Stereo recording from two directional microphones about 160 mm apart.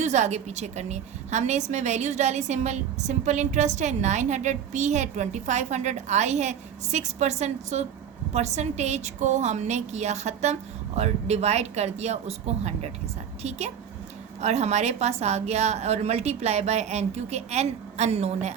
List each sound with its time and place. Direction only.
0.0 s a woman's voice: 45° right (ahead or behind)